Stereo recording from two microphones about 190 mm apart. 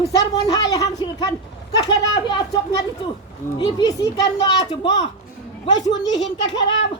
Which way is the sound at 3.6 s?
20° left (ahead or behind).